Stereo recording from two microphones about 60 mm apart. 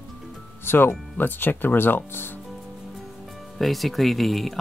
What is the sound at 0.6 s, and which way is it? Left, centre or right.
Speech, left.